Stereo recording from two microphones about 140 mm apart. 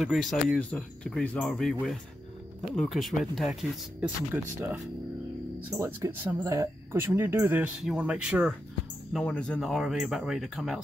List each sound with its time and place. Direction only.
0.0 s speech: centre (ahead or behind)
4.3 s speech: 20° right (ahead or behind)
5.8 s speech: 20° right (ahead or behind); by 8.5 s 5° right (ahead or behind)
9.2 s speech: 5° left (ahead or behind)